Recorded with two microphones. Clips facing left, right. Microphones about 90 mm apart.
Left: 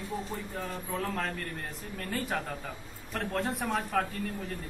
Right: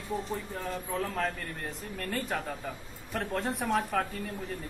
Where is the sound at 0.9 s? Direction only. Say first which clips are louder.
Right 1 dB; centre (ahead or behind).